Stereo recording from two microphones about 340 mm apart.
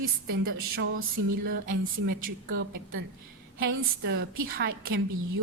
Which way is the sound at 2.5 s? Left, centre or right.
Right.